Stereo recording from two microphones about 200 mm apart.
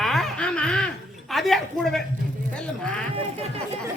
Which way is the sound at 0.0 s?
Centre (ahead or behind).